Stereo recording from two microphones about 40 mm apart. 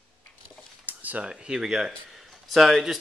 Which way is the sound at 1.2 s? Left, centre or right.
Right.